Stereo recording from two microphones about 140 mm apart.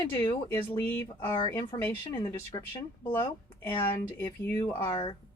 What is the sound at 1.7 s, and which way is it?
Speech, 40° left (ahead or behind).